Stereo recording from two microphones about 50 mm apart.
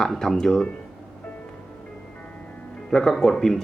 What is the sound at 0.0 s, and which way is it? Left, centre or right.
Speech, centre.